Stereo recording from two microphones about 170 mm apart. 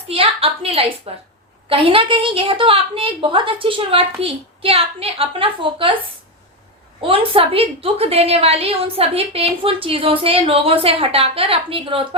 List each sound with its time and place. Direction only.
0.1 s a woman's voice: 35° right (ahead or behind)
7.0 s a woman's voice: 30° right (ahead or behind)